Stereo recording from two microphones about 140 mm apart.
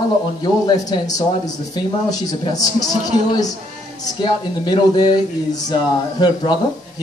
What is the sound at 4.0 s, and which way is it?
Speech, 30° left (ahead or behind).